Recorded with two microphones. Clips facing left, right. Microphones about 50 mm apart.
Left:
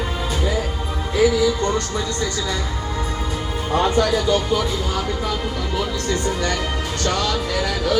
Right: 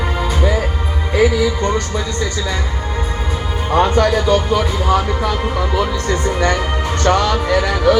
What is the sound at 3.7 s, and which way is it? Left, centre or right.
Music, right.